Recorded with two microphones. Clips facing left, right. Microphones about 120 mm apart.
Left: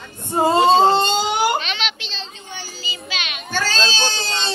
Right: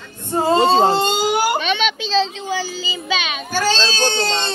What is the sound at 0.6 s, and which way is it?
Speech, 40° right (ahead or behind).